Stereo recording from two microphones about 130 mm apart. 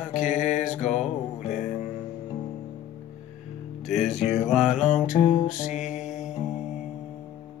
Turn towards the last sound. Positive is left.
turn(degrees=-5)  # may be behind; listen again after turning